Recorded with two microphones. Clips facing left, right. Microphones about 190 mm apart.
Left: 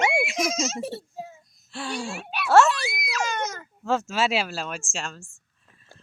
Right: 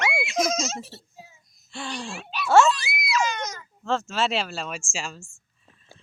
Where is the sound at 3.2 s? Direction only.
50° left (ahead or behind).